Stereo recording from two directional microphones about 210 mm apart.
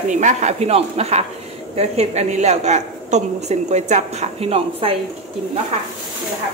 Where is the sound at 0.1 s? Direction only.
35° right (ahead or behind).